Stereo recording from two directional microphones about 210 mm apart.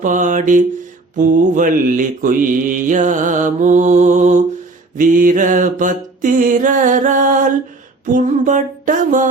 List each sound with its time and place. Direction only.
0.0 s mantra: 35° right (ahead or behind)